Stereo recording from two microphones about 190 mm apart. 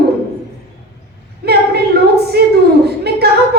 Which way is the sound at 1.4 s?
55° right (ahead or behind).